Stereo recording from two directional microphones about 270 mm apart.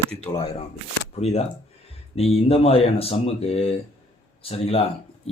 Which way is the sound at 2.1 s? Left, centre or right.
Left.